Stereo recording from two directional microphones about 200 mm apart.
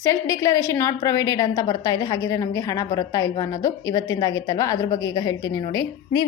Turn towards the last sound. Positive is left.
turn(degrees=20)  # may be behind; listen again after turning